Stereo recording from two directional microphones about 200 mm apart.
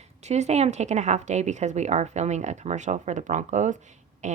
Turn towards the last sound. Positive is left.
turn(degrees=-35)  # may be behind; listen again after turning